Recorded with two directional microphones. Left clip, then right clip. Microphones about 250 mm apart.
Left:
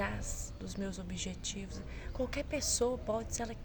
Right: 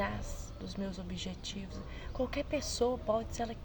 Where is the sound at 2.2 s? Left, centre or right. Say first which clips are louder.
Right 1 dB; centre.